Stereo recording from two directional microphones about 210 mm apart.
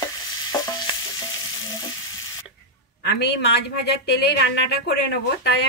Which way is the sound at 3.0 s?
50° left (ahead or behind).